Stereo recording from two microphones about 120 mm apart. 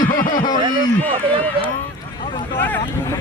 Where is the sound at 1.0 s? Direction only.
10° left (ahead or behind).